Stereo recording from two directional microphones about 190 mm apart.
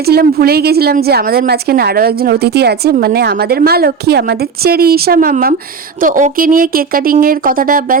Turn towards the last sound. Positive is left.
turn(degrees=-45)  # may be behind; listen again after turning